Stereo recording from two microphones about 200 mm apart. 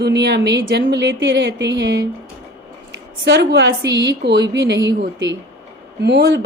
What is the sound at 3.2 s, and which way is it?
A woman's voice, 60° right (ahead or behind).